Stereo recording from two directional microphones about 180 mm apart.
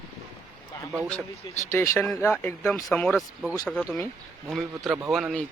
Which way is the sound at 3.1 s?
5° right (ahead or behind).